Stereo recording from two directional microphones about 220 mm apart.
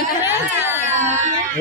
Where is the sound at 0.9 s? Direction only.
35° right (ahead or behind).